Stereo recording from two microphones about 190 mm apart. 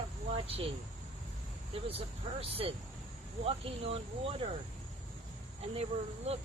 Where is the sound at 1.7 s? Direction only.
30° right (ahead or behind).